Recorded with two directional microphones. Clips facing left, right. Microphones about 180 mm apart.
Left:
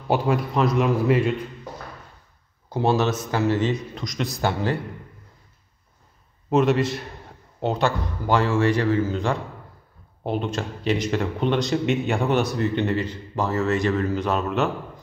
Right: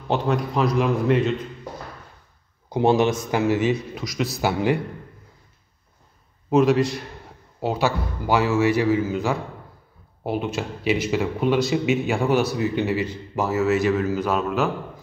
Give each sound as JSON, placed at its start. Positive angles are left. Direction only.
{"t": 0.1, "sound": "speech", "side_deg": 5}
{"t": 2.7, "sound": "a man's voice", "side_deg": -15}
{"t": 6.5, "sound": "a man's voice", "side_deg": 0}